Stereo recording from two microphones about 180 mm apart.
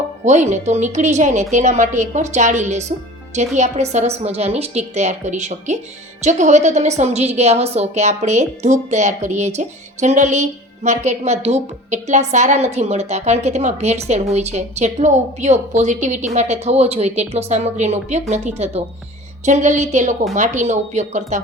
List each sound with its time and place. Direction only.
0.3 s a woman's voice: 40° right (ahead or behind)